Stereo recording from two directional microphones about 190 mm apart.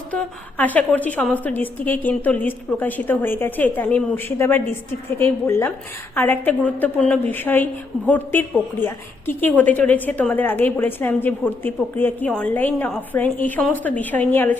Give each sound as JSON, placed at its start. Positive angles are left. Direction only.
{"t": 0.1, "sound": "a woman's voice", "side_deg": 10}